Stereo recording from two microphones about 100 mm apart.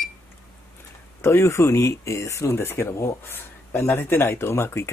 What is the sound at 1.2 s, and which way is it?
Speech, 25° left (ahead or behind).